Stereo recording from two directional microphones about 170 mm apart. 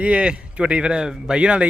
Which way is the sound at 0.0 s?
5° right (ahead or behind).